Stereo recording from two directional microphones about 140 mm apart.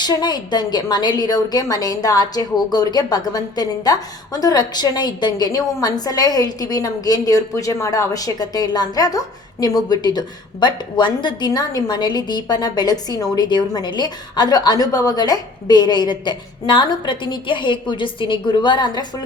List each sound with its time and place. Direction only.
0.0 s a woman's voice: 30° left (ahead or behind)